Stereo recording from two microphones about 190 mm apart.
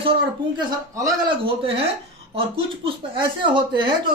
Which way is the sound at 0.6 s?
20° right (ahead or behind).